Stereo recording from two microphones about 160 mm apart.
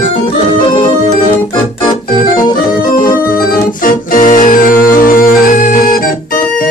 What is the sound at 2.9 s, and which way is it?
Organ, 60° left (ahead or behind).